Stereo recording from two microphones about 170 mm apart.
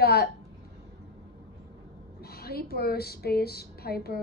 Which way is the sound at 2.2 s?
65° left (ahead or behind).